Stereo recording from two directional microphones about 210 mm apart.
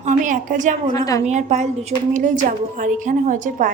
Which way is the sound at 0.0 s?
35° right (ahead or behind).